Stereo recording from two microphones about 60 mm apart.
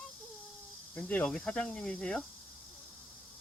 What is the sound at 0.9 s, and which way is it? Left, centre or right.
Speech, left.